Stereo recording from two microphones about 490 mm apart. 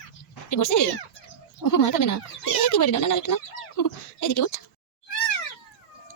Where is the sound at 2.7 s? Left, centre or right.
Left.